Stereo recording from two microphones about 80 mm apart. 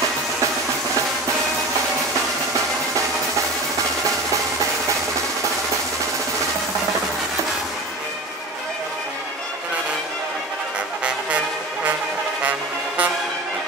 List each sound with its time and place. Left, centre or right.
12.4 s music: centre